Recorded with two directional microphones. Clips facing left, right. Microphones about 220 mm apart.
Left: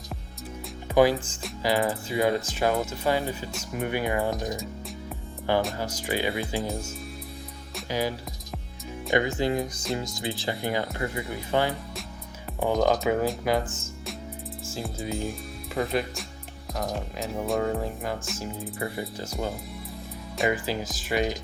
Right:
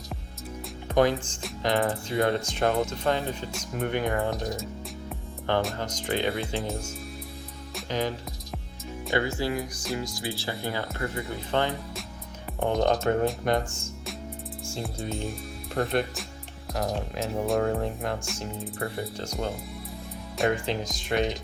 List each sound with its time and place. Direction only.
0.9 s speech: 5° left (ahead or behind)
5.5 s speech: 10° left (ahead or behind)
7.8 s music: 10° left (ahead or behind)
9.1 s speech: 20° left (ahead or behind); by 21.3 s 5° left (ahead or behind)